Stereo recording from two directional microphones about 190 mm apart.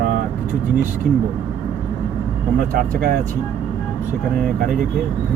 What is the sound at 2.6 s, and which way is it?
Speech, 50° right (ahead or behind).